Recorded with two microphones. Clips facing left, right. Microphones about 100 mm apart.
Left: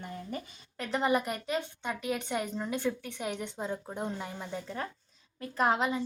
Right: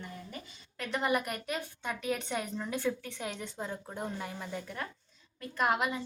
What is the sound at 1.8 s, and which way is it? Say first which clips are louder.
A woman's voice: left 1 dB; 15° left (ahead or behind).